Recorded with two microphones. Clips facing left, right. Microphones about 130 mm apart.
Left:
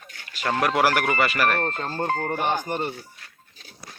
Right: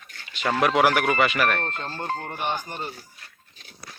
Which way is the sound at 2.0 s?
50° left (ahead or behind).